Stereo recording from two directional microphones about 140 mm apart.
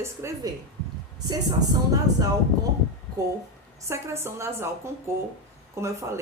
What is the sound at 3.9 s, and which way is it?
A woman's voice, 20° right (ahead or behind).